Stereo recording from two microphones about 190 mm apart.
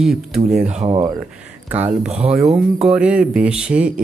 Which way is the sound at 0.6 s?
35° right (ahead or behind).